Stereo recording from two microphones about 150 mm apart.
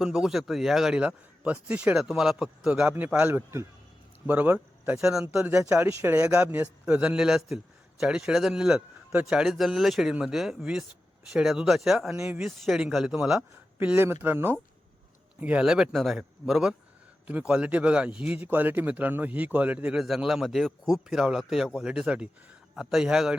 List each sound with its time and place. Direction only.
0.0 s a man's voice: 5° right (ahead or behind)
5.5 s a man's voice: 15° right (ahead or behind)
12.1 s speech: 20° right (ahead or behind)
12.4 s a man's voice: centre (ahead or behind)
13.7 s a man's voice: 15° right (ahead or behind)